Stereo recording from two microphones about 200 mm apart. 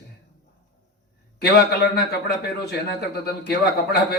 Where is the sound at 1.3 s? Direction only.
50° left (ahead or behind).